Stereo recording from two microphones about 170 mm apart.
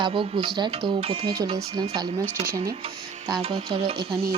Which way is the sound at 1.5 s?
25° right (ahead or behind).